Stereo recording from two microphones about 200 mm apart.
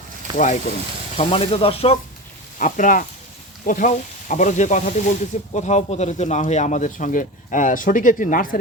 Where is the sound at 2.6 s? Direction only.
40° left (ahead or behind).